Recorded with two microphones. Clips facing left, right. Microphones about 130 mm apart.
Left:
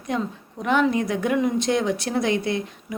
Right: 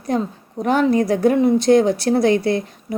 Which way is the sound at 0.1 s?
40° right (ahead or behind).